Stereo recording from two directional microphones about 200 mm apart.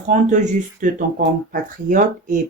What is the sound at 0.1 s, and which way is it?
Speech, 40° right (ahead or behind).